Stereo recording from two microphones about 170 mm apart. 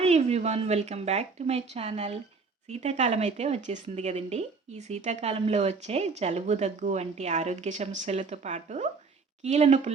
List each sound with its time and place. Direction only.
0.0 s a woman's voice: 40° right (ahead or behind)